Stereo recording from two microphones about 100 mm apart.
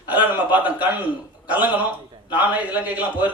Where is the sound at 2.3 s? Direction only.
15° right (ahead or behind).